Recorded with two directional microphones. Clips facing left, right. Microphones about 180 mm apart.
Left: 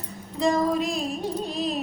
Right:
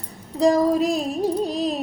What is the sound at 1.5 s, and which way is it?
Music, 40° right (ahead or behind).